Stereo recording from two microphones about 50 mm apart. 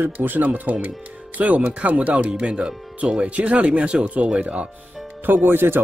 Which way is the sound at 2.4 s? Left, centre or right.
Centre.